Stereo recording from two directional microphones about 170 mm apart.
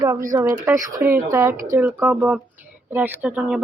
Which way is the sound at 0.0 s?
20° right (ahead or behind).